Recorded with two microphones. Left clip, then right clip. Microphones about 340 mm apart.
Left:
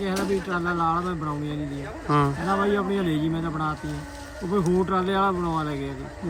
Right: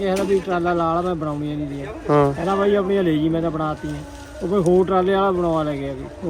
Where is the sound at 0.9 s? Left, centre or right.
Right.